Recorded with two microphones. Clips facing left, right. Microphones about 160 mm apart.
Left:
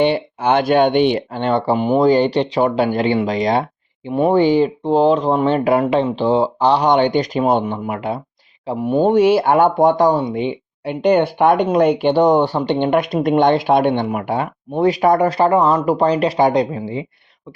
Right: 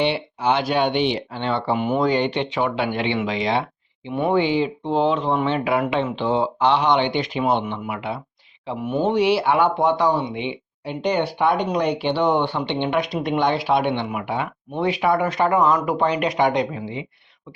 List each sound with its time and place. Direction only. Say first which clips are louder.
0.0 s speech: left 5 dB; 50° left (ahead or behind)